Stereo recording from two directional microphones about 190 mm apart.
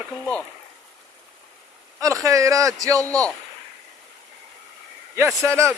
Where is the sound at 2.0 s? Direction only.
15° right (ahead or behind).